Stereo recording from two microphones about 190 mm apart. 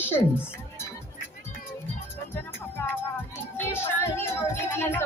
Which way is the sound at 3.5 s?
10° left (ahead or behind).